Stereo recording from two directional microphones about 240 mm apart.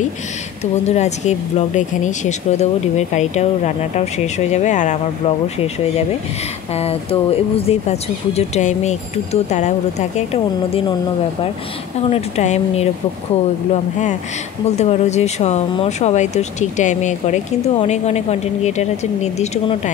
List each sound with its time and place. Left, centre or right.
0.8 s speech: left
12.1 s speech: left
14.8 s speech: left